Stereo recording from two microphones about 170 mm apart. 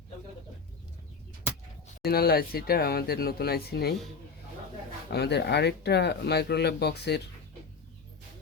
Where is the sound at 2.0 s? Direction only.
65° left (ahead or behind).